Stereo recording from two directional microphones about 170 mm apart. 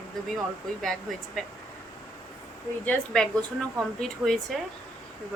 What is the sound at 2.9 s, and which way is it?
A woman's voice, 5° left (ahead or behind).